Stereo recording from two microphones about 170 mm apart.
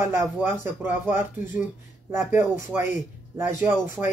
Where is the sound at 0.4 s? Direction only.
15° right (ahead or behind).